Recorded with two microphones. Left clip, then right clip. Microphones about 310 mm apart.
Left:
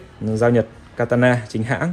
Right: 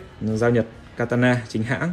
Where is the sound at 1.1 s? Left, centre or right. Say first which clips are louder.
Left 4 dB; centre.